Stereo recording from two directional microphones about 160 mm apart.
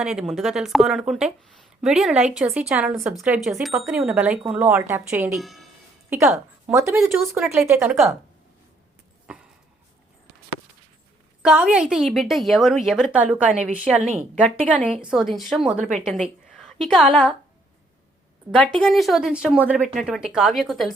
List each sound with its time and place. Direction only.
0.0 s a woman's voice: 5° right (ahead or behind)
5.3 s a woman's voice: centre (ahead or behind)
6.1 s a woman's voice: 15° right (ahead or behind)
7.5 s a woman's voice: 15° right (ahead or behind)
11.4 s a woman's voice: 5° right (ahead or behind)
14.0 s speech: 45° right (ahead or behind)
14.6 s a woman's voice: 5° left (ahead or behind)
16.0 s a sound: centre (ahead or behind)
16.8 s a woman's voice: centre (ahead or behind)
18.5 s a woman's voice: 5° left (ahead or behind)